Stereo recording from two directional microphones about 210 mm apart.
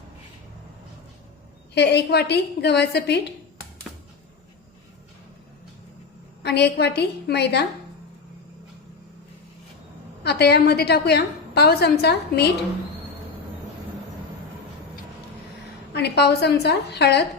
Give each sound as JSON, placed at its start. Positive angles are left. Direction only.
{"t": 1.7, "sound": "a woman's voice", "side_deg": 55}
{"t": 6.4, "sound": "a woman's voice", "side_deg": 50}
{"t": 10.2, "sound": "a woman's voice", "side_deg": 50}
{"t": 15.9, "sound": "a woman's voice", "side_deg": 50}